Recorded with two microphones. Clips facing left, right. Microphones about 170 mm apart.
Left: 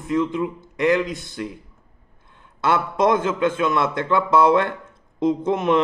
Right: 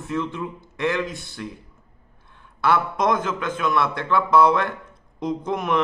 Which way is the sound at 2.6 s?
25° left (ahead or behind).